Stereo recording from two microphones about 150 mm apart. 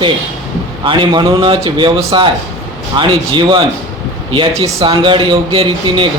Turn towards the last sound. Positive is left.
turn(degrees=-35)  # may be behind; listen again after turning